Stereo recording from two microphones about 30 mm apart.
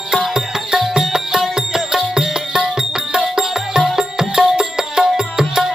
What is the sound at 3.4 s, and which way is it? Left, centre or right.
Music, centre.